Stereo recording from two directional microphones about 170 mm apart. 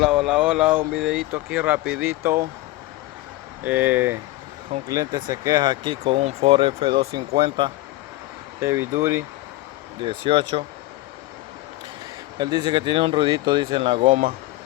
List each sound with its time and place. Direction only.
0.0 s speech: 5° right (ahead or behind)
3.6 s speech: 10° right (ahead or behind); by 7.7 s 30° right (ahead or behind)
8.6 s speech: 15° right (ahead or behind)
10.0 s speech: 30° right (ahead or behind)
12.4 s speech: 25° right (ahead or behind)
14.1 s speech: 55° right (ahead or behind)